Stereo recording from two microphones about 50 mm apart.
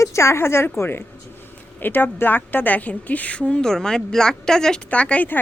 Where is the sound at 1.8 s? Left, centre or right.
Left; by 4.8 s centre.